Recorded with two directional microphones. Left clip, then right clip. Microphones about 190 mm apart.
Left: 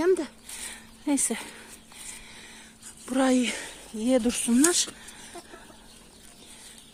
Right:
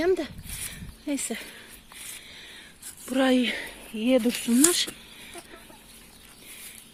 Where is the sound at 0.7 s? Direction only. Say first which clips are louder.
Left 4 dB; 20° left (ahead or behind).